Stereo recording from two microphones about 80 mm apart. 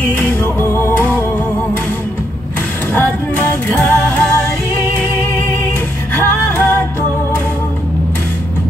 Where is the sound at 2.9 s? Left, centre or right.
Left.